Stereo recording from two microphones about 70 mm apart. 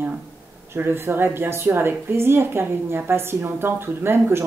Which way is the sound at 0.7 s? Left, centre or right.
Right.